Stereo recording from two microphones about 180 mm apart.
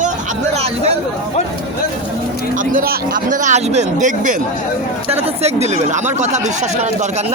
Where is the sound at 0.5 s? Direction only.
35° right (ahead or behind).